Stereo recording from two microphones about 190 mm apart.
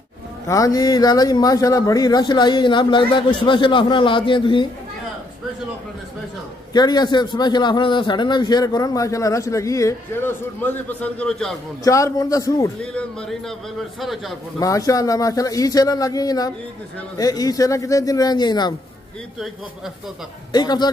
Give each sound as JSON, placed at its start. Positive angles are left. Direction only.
{"t": 0.5, "sound": "a man's voice", "side_deg": 20}
{"t": 6.7, "sound": "a man's voice", "side_deg": 20}
{"t": 11.8, "sound": "a man's voice", "side_deg": 15}
{"t": 12.8, "sound": "a man's voice", "side_deg": 5}
{"t": 14.6, "sound": "a man's voice", "side_deg": 15}
{"t": 20.5, "sound": "a man's voice", "side_deg": 20}